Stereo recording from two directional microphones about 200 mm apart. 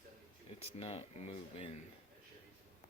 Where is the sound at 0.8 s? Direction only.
30° left (ahead or behind).